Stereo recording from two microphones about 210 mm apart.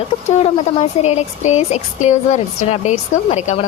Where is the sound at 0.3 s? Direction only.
30° left (ahead or behind).